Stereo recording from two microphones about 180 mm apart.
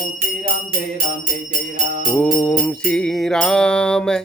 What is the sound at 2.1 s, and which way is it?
Mantra, 5° left (ahead or behind).